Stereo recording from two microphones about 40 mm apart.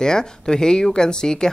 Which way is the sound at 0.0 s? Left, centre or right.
Centre.